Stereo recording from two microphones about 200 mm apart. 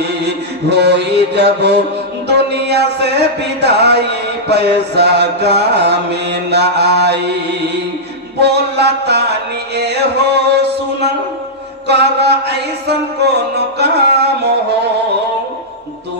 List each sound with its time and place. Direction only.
0.0 s mantra: 55° right (ahead or behind)
2.2 s music: 55° right (ahead or behind)
9.8 s chant: 55° right (ahead or behind)
11.9 s music: 55° right (ahead or behind)